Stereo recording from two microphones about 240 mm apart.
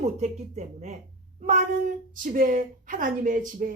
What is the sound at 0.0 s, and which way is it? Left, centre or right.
A woman's voice, right.